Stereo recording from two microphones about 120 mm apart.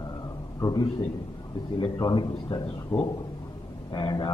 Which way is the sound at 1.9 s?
35° left (ahead or behind).